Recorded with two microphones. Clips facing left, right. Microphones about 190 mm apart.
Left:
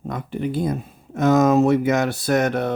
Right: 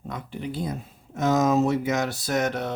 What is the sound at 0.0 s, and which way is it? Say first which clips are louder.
Speech: left 7 dB; 50° left (ahead or behind).